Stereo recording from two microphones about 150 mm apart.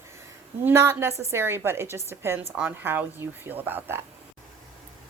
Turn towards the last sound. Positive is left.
turn(degrees=-15)  # may be behind; listen again after turning